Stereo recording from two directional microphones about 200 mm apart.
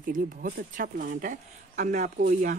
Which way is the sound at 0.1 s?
40° right (ahead or behind).